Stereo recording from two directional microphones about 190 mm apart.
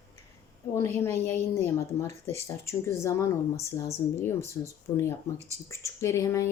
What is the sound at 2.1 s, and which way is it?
Speech, 35° right (ahead or behind).